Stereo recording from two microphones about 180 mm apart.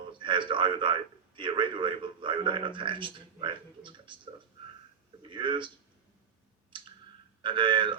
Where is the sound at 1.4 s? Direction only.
25° right (ahead or behind).